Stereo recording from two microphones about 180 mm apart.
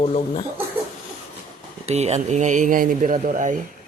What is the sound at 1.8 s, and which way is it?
A man's voice, 35° right (ahead or behind).